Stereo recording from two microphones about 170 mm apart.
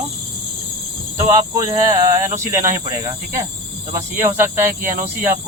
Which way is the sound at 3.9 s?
15° right (ahead or behind).